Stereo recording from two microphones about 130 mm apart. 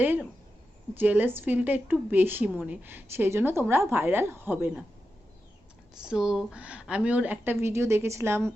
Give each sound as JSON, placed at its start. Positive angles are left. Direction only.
{"t": 0.9, "sound": "a woman's voice", "side_deg": -15}
{"t": 6.0, "sound": "a woman's voice", "side_deg": -5}